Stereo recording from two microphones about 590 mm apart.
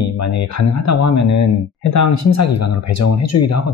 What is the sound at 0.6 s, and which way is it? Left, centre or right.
Speech, left.